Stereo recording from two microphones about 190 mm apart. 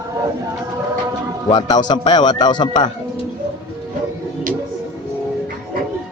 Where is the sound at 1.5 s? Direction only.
25° left (ahead or behind).